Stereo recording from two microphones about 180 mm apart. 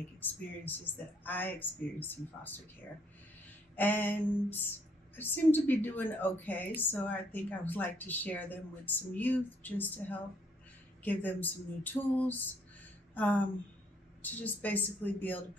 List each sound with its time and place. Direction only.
1.2 s speech: 10° left (ahead or behind)
3.7 s speech: 10° left (ahead or behind)